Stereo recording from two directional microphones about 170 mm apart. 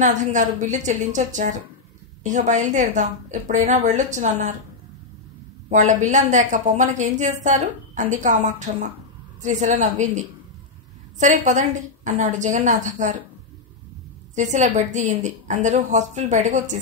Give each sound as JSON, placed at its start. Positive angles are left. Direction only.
{"t": 0.0, "sound": "a woman's voice", "side_deg": -45}
{"t": 5.7, "sound": "a woman's voice", "side_deg": -45}
{"t": 14.3, "sound": "a woman's voice", "side_deg": -45}